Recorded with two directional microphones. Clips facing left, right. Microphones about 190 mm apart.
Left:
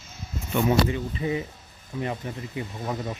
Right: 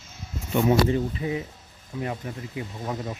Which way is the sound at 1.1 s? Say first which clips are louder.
Left 1 dB; centre (ahead or behind).